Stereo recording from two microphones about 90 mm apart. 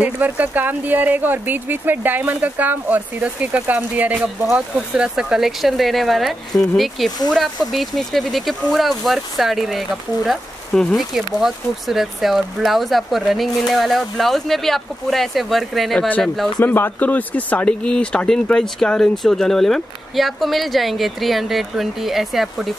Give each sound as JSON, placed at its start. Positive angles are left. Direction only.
{"t": 0.0, "sound": "speech", "side_deg": -20}
{"t": 16.6, "sound": "speech", "side_deg": 25}